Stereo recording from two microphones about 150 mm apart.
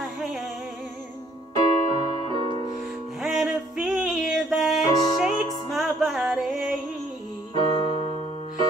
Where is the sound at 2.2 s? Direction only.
40° right (ahead or behind).